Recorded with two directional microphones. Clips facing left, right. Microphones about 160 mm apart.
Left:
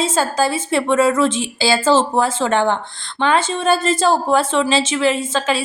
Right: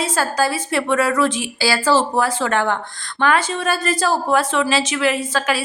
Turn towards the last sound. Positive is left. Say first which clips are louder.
# left 2 dB
turn(degrees=25)  # may be behind; listen again after turning